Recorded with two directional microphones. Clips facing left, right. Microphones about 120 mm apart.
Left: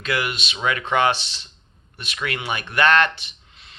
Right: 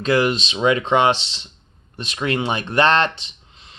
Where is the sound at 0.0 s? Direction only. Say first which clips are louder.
Right 8 dB; 30° right (ahead or behind).